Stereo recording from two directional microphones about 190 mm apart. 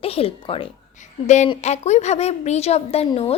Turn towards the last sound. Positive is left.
turn(degrees=30)  # may be behind; listen again after turning